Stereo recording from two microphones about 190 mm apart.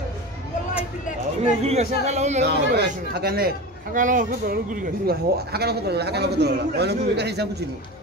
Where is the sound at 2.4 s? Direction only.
60° right (ahead or behind).